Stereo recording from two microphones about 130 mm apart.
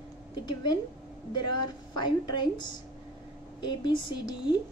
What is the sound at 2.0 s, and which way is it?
Speech, 35° left (ahead or behind).